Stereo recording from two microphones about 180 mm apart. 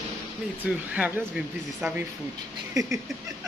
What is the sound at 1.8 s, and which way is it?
Speech, 10° right (ahead or behind).